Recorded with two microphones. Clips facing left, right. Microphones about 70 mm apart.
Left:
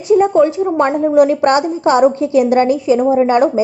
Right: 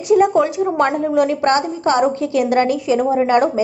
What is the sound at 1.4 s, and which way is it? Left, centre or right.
A woman's voice, centre.